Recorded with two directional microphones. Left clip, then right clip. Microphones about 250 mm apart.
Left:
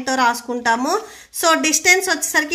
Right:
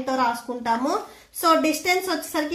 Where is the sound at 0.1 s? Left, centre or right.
Left.